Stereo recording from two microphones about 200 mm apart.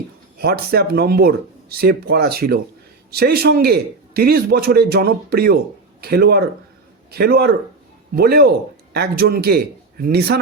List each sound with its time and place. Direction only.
0.3 s a man's voice: 50° right (ahead or behind)